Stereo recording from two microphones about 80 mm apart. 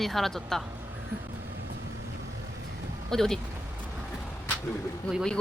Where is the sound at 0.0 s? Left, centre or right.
Centre.